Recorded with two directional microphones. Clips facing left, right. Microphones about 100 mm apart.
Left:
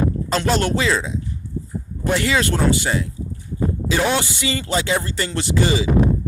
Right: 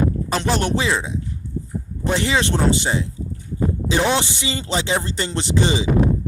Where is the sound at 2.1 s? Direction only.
20° right (ahead or behind).